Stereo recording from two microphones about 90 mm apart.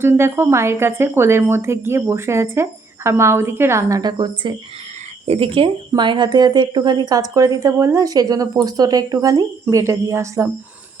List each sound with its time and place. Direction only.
0.0 s speech: 30° right (ahead or behind)
4.0 s speech: 50° right (ahead or behind)
5.4 s speech: 75° right (ahead or behind)
6.0 s speech: 60° right (ahead or behind); by 10.5 s 35° right (ahead or behind)